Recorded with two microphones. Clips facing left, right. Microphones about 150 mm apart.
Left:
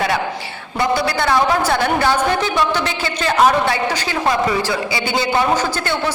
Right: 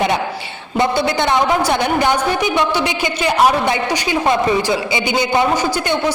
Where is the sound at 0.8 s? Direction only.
20° right (ahead or behind).